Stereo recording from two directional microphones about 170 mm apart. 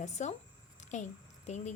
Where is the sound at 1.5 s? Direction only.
45° left (ahead or behind).